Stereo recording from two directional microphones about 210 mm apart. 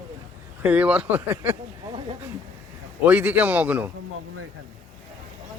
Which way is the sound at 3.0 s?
10° right (ahead or behind).